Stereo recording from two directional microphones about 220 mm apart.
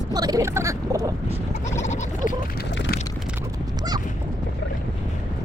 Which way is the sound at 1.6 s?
30° left (ahead or behind).